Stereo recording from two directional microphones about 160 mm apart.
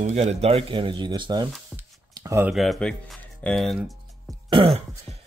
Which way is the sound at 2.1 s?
25° right (ahead or behind).